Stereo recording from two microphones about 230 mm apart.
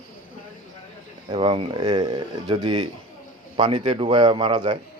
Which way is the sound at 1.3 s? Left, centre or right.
Right.